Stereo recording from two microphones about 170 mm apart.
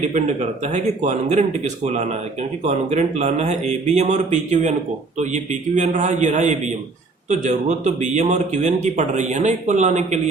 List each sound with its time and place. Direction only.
0.0 s speech: 45° right (ahead or behind)